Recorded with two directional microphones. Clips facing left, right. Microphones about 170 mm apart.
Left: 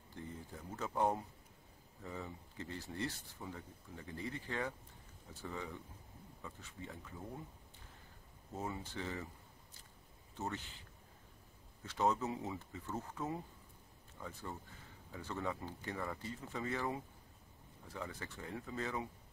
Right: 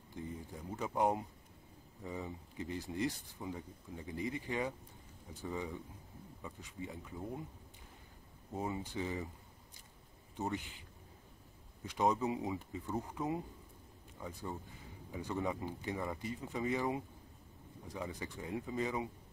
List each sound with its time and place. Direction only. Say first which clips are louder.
0.1 s speech: right 4 dB; 15° right (ahead or behind)
8.5 s speech: right 4 dB; 15° right (ahead or behind)
10.3 s speech: right 4 dB; 15° right (ahead or behind)
11.8 s speech: right 2 dB; 15° right (ahead or behind)